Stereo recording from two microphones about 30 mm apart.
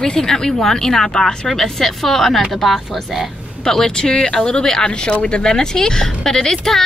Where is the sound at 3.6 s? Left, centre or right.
Centre.